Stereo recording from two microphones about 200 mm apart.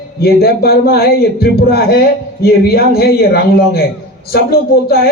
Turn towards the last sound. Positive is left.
turn(degrees=50)  # may be behind; listen again after turning